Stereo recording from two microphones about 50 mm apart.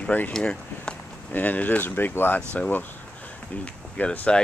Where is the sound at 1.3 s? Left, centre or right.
Left.